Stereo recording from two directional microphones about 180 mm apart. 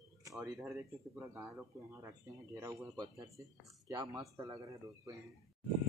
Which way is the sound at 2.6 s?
15° right (ahead or behind).